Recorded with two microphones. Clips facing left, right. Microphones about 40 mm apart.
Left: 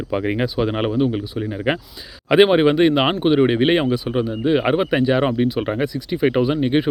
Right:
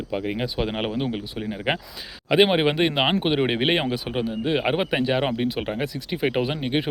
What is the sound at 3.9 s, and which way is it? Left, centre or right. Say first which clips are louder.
Speech: left 5 dB; centre.